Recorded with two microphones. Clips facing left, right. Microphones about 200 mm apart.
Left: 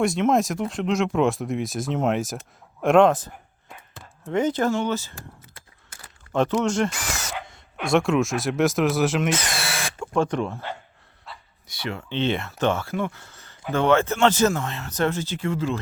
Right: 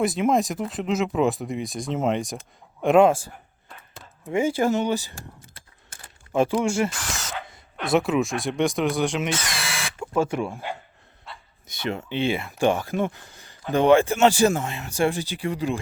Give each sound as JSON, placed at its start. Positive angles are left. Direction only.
{"t": 0.0, "sound": "speech", "side_deg": 0}
{"t": 4.3, "sound": "speech", "side_deg": -10}
{"t": 6.3, "sound": "speech", "side_deg": -10}
{"t": 9.5, "sound": "a sound", "side_deg": 40}
{"t": 10.0, "sound": "speech", "side_deg": -5}
{"t": 11.3, "sound": "bow-wow", "side_deg": 0}
{"t": 11.7, "sound": "speech", "side_deg": -20}
{"t": 12.1, "sound": "speech", "side_deg": -10}